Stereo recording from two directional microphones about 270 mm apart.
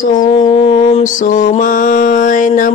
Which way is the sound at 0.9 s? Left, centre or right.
Left.